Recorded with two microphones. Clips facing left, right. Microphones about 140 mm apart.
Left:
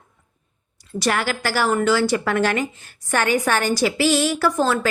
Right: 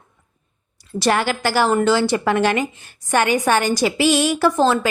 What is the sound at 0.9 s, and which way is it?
A woman's voice, 30° right (ahead or behind).